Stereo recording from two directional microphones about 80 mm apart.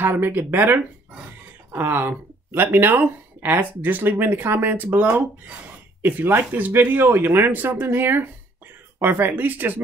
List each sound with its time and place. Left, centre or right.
0.0 s speech: right